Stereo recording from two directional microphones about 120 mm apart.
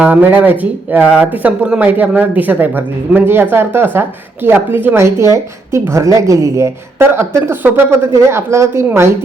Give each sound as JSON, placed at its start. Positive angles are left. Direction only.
{"t": 0.0, "sound": "speech", "side_deg": -15}